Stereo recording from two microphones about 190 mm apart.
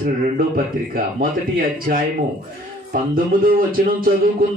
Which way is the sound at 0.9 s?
50° right (ahead or behind).